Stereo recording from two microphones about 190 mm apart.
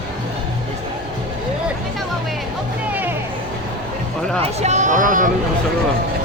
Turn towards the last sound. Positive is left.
turn(degrees=-45)  # may be behind; listen again after turning